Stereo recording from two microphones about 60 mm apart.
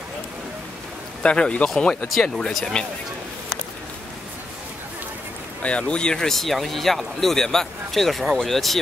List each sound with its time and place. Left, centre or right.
1.2 s speech: centre
5.6 s speech: centre